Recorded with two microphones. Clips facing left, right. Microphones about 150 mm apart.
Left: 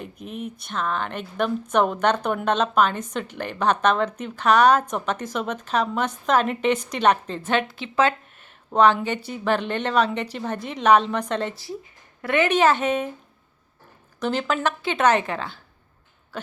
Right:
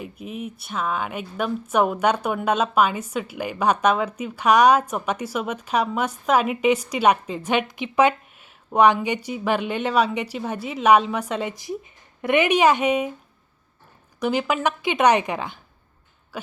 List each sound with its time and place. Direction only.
0.0 s speech: 5° right (ahead or behind)
14.2 s speech: 10° right (ahead or behind)
16.3 s a sound: 10° right (ahead or behind)